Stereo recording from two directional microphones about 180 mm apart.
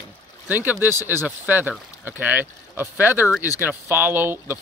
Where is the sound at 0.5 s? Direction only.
10° right (ahead or behind).